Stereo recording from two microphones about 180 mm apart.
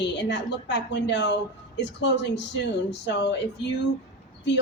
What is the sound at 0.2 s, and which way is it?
A woman's voice, 75° left (ahead or behind).